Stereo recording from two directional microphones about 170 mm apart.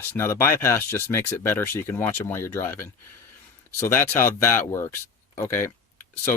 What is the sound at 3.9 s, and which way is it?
Speech, 15° left (ahead or behind).